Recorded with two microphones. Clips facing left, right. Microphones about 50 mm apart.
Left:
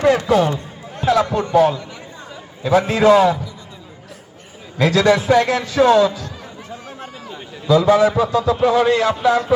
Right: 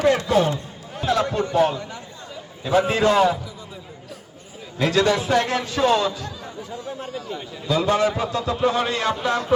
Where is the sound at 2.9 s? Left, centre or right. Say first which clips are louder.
Left 7 dB; left.